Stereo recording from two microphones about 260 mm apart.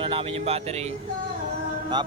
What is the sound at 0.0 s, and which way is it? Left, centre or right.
Speech, centre.